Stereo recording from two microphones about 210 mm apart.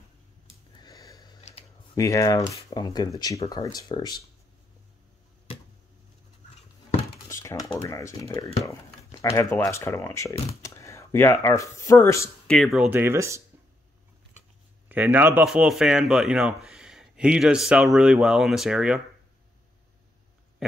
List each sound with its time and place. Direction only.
0.8 s sniff: 15° left (ahead or behind)
2.0 s speech: 15° left (ahead or behind)
7.2 s a sound: 15° left (ahead or behind)
8.6 s speech: 15° left (ahead or behind)
12.5 s speech: centre (ahead or behind)
14.9 s a man's voice: 10° right (ahead or behind)